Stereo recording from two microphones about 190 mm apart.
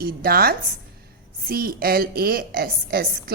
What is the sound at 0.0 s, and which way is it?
A woman's voice, 50° right (ahead or behind).